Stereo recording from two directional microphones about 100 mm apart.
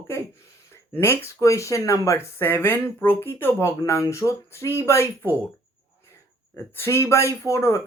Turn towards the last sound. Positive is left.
turn(degrees=25)  # may be behind; listen again after turning